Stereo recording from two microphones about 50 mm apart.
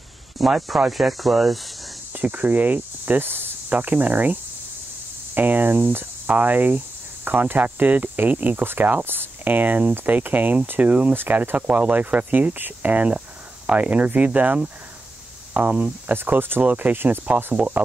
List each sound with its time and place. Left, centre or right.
0.4 s speech: centre
2.1 s speech: right
3.3 s cricket: right
3.7 s speech: right
11.1 s speech: right
17.6 s speech: centre